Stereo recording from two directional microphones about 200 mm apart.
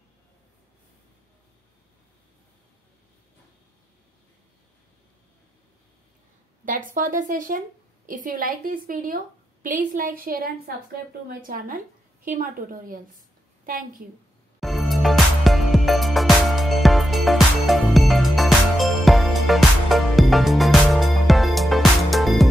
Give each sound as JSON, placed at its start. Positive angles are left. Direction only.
{"t": 6.6, "sound": "a woman's voice", "side_deg": -40}
{"t": 14.6, "sound": "music", "side_deg": 0}